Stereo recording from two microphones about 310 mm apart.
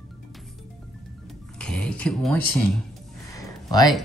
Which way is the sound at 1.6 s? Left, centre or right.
Centre.